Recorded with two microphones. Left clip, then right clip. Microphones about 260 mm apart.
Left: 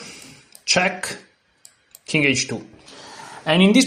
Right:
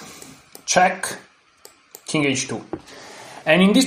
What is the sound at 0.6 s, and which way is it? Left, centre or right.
A man's voice, left.